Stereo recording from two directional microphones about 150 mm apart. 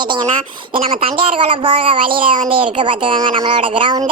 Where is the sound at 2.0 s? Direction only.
75° right (ahead or behind).